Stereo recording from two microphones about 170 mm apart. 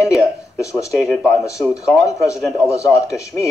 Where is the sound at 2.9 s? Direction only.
20° left (ahead or behind).